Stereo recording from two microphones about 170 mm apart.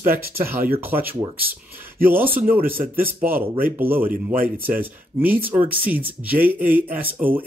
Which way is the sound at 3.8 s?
10° right (ahead or behind).